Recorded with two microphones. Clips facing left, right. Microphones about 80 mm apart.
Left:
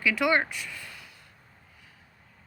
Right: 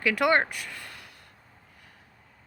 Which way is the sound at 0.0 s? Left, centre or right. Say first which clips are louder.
Right 2 dB; right.